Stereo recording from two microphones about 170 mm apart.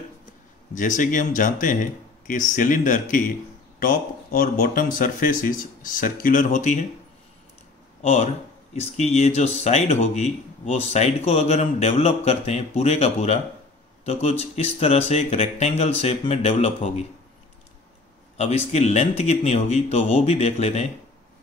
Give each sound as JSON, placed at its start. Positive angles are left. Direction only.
{"t": 0.7, "sound": "speech", "side_deg": 50}
{"t": 8.0, "sound": "speech", "side_deg": 45}
{"t": 14.5, "sound": "speech", "side_deg": 35}
{"t": 18.4, "sound": "speech", "side_deg": 40}